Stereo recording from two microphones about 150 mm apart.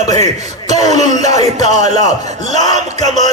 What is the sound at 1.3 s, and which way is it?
Music, 25° left (ahead or behind).